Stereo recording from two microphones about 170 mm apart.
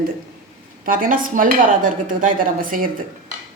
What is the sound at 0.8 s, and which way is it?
Speech, 55° right (ahead or behind).